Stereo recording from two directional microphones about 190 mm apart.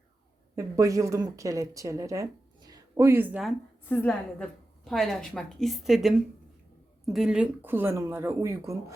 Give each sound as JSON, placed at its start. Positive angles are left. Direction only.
{"t": 0.5, "sound": "a woman's voice", "side_deg": -15}
{"t": 3.8, "sound": "a woman's voice", "side_deg": 10}